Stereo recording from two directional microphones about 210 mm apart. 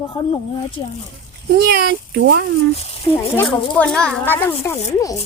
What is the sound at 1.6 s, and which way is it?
Speech, 50° right (ahead or behind).